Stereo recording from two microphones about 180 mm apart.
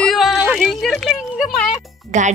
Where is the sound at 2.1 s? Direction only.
40° right (ahead or behind).